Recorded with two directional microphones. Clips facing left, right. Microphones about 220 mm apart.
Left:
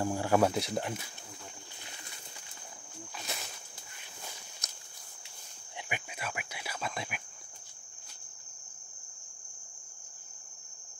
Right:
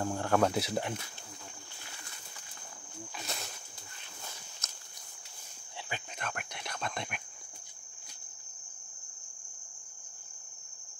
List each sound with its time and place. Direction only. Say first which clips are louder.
0.0 s speech: left 1 dB; 10° left (ahead or behind)
4.6 s walk: left 2 dB; 15° left (ahead or behind)
5.8 s cricket: left 1 dB; 15° left (ahead or behind)